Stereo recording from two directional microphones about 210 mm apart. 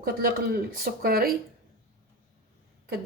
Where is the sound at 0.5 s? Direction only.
45° right (ahead or behind).